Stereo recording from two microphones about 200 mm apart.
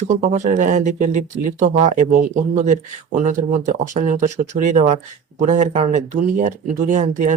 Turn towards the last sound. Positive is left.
turn(degrees=-40)  # may be behind; listen again after turning